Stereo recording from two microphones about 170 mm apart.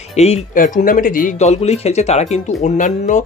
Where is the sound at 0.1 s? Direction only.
40° left (ahead or behind).